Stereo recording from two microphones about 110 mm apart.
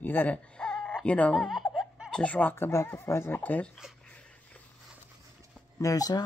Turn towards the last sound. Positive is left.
turn(degrees=35)  # may be behind; listen again after turning